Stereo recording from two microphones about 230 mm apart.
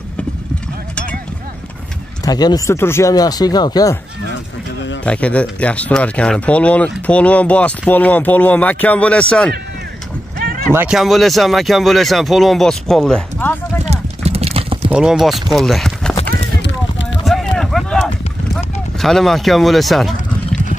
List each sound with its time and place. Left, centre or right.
2.2 s speech: centre
5.0 s speech: centre
10.7 s speech: centre
13.8 s clip-clop: right
14.9 s speech: centre
16.6 s a sound: left
17.3 s a sound: centre